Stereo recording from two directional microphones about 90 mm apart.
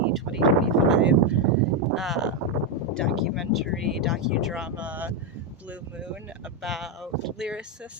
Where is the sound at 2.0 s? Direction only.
5° right (ahead or behind).